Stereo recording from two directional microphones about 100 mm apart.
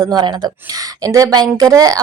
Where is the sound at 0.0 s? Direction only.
45° right (ahead or behind).